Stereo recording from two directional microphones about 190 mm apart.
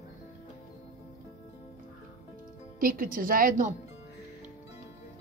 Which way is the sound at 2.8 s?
50° right (ahead or behind).